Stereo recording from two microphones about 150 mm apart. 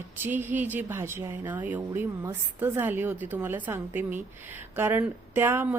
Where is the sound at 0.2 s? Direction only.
10° right (ahead or behind).